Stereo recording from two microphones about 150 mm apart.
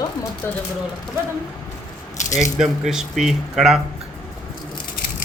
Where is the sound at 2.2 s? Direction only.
50° left (ahead or behind).